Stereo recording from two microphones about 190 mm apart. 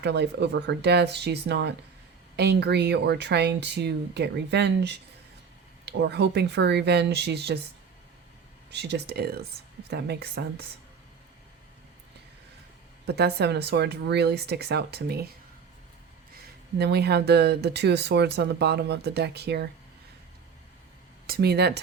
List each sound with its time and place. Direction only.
0.0 s speech: 65° right (ahead or behind)
8.7 s speech: 60° right (ahead or behind)
13.1 s speech: 60° right (ahead or behind)
16.7 s speech: 60° right (ahead or behind)
21.2 s speech: 55° right (ahead or behind)